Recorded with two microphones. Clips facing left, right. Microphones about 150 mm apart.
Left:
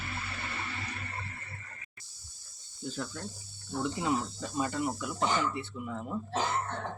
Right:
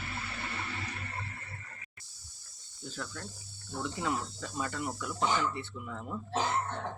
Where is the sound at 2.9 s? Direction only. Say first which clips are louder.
Left 1 dB; 20° left (ahead or behind).